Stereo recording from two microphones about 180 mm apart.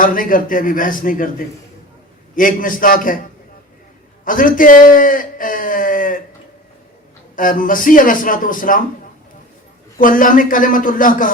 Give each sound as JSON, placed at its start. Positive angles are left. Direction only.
{"t": 0.0, "sound": "a man's voice", "side_deg": 50}
{"t": 2.3, "sound": "a man's voice", "side_deg": 50}
{"t": 4.3, "sound": "speech", "side_deg": 50}
{"t": 7.3, "sound": "a man's voice", "side_deg": 50}
{"t": 10.0, "sound": "a man's voice", "side_deg": 50}